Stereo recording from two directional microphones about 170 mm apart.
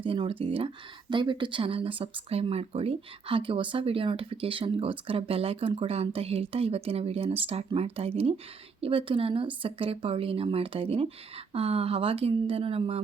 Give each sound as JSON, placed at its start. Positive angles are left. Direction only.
{"t": 0.0, "sound": "speech", "side_deg": -30}